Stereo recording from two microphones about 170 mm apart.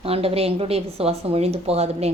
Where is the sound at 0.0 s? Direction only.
35° right (ahead or behind).